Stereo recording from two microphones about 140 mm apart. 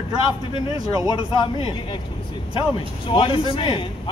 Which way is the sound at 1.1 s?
30° left (ahead or behind).